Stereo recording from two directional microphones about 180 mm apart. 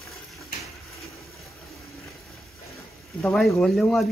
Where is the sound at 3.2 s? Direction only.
Centre (ahead or behind).